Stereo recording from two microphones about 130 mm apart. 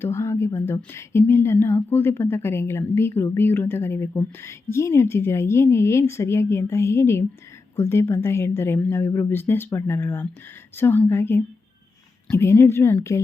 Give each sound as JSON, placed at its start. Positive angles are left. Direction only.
{"t": 0.0, "sound": "a woman's voice", "side_deg": 20}